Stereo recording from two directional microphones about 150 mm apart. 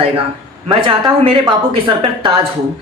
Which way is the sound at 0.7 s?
35° right (ahead or behind).